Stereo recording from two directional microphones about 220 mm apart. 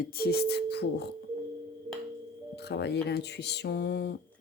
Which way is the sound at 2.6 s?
50° left (ahead or behind).